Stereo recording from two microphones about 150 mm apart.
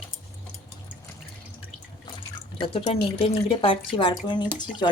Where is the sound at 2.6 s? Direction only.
40° left (ahead or behind).